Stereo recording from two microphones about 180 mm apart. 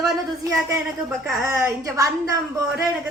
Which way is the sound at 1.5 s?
15° right (ahead or behind).